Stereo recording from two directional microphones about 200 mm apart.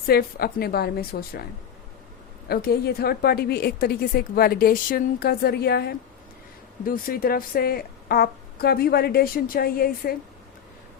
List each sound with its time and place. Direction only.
0.1 s a woman's voice: 50° left (ahead or behind)
2.5 s a woman's voice: 50° left (ahead or behind)